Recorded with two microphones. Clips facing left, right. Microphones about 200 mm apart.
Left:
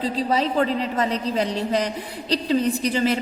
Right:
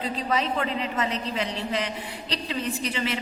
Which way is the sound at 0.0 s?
35° left (ahead or behind).